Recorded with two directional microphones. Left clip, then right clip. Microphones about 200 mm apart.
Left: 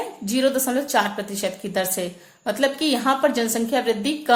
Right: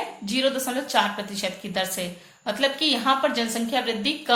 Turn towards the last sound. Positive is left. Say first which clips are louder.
# left 4 dB
turn(degrees=55)  # may be behind; listen again after turning